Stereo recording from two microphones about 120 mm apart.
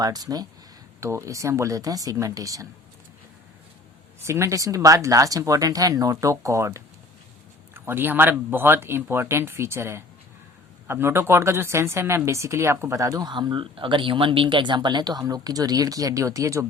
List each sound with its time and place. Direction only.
0.0 s speech: 30° right (ahead or behind)
4.2 s speech: 25° right (ahead or behind)